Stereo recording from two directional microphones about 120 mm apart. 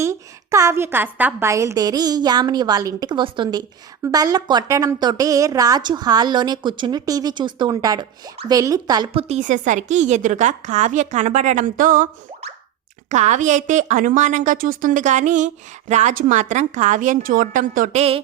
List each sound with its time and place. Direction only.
0.0 s a woman's voice: 25° right (ahead or behind); by 3.6 s 40° right (ahead or behind)
4.0 s a woman's voice: 30° right (ahead or behind)
9.1 s a woman's voice: 65° right (ahead or behind); by 11.7 s 90° right
13.1 s a woman's voice: 80° right; by 18.2 s 65° right (ahead or behind)